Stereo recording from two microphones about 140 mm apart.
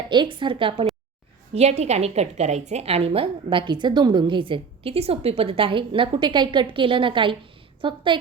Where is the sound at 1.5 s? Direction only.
50° right (ahead or behind).